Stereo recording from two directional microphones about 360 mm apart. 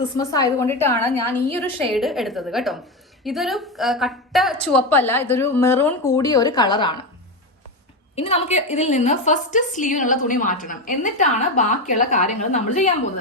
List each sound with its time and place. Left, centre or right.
0.2 s a woman's voice: centre
8.1 s a woman's voice: centre